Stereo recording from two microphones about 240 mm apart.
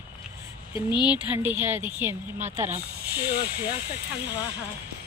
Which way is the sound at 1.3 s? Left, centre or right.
Centre.